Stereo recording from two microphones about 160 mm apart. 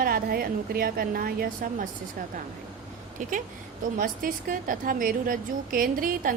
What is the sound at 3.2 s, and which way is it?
A woman's voice, 55° right (ahead or behind).